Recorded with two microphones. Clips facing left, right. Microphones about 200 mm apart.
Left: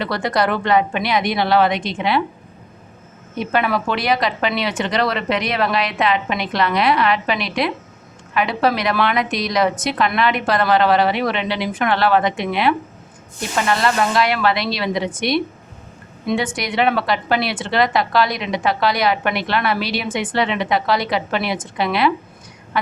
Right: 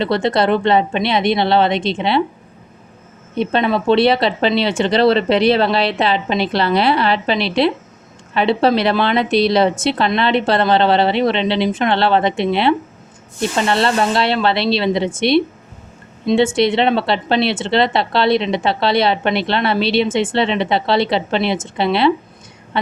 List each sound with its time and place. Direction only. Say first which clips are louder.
0.0 s speech: right 4 dB; 25° right (ahead or behind)
3.3 s speech: right 3 dB; 25° right (ahead or behind)
22.7 s a sound: right 2 dB; 25° right (ahead or behind)